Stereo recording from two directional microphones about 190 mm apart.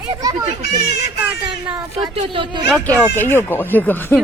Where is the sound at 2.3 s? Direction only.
25° right (ahead or behind).